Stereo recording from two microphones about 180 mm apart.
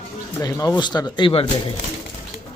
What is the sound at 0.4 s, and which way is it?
A man's voice, 20° left (ahead or behind).